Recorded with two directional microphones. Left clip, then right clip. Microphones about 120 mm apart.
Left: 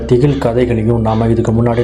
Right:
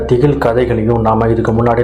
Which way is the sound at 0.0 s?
60° left (ahead or behind).